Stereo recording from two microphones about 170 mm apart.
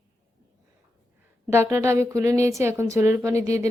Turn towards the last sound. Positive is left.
turn(degrees=-20)  # may be behind; listen again after turning